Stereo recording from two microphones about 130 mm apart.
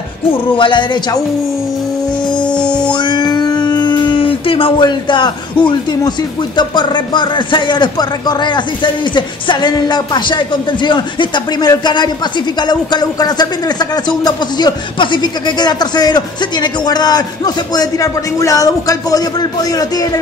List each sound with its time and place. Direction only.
0.6 s speech: 35° left (ahead or behind)
2.6 s music: 10° left (ahead or behind)
2.9 s a sound: 35° left (ahead or behind)
5.7 s a man's voice: 35° left (ahead or behind)